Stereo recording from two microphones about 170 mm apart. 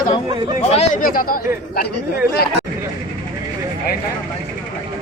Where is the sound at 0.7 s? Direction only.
50° left (ahead or behind).